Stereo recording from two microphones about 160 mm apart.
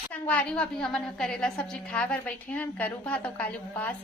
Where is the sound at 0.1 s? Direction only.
10° left (ahead or behind).